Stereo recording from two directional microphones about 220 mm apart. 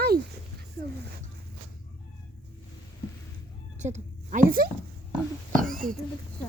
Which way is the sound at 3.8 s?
35° right (ahead or behind).